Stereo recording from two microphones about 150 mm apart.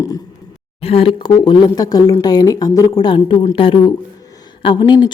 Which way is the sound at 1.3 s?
25° left (ahead or behind).